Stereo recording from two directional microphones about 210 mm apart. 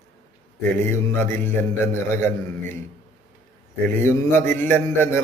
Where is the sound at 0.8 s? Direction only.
10° left (ahead or behind).